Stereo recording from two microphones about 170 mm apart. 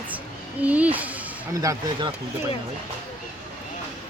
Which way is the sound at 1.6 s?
25° right (ahead or behind).